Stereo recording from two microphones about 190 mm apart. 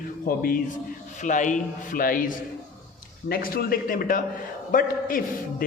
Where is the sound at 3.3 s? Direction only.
50° left (ahead or behind).